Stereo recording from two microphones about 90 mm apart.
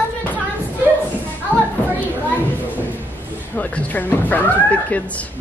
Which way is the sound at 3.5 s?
20° left (ahead or behind).